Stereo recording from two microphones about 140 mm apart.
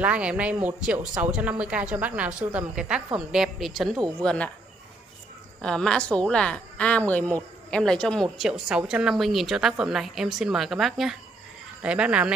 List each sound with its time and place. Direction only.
0.0 s speech: 10° right (ahead or behind); by 4.5 s 5° left (ahead or behind)
5.6 s speech: 5° left (ahead or behind)